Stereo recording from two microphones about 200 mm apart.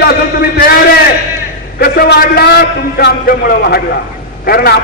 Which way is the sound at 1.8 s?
50° left (ahead or behind).